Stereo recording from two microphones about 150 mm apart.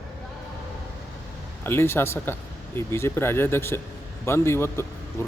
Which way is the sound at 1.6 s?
15° left (ahead or behind).